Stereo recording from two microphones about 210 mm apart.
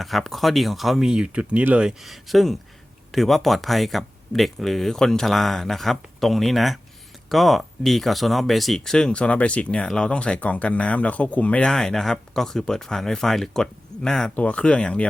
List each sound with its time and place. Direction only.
0.0 s speech: centre (ahead or behind)